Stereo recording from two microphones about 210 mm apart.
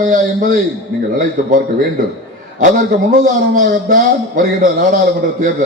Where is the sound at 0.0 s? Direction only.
40° right (ahead or behind).